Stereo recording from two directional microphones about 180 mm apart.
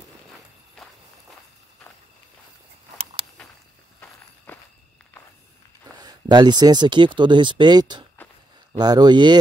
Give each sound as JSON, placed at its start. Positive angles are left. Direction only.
{"t": 4.5, "sound": "walk", "side_deg": 10}
{"t": 5.9, "sound": "speech", "side_deg": -25}